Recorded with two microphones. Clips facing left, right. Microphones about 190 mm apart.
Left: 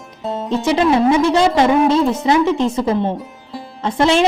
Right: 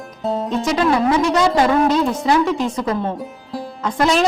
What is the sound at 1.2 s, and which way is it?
Speech, 30° left (ahead or behind).